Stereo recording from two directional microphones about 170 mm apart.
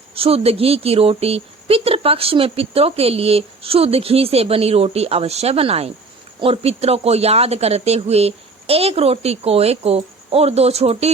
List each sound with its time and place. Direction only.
0.1 s speech: 35° right (ahead or behind)